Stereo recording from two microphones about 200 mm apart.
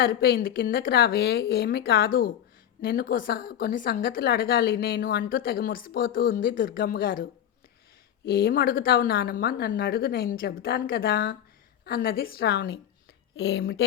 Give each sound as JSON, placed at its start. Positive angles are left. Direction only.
{"t": 0.0, "sound": "a woman's voice", "side_deg": 50}